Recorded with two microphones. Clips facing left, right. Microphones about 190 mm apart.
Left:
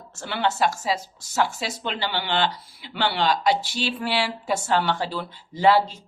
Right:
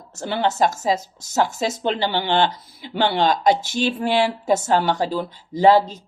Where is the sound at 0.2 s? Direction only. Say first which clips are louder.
Right 4 dB; 45° right (ahead or behind).